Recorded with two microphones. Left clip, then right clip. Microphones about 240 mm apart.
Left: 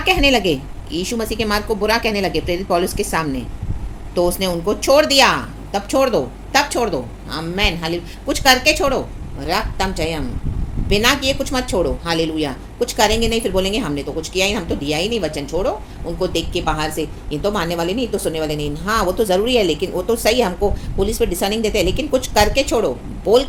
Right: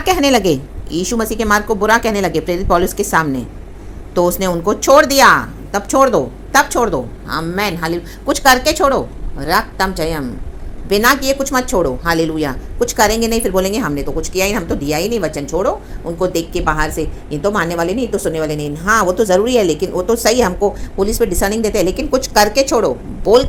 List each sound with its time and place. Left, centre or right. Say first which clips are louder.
0.0 s a woman's voice: right 2 dB; centre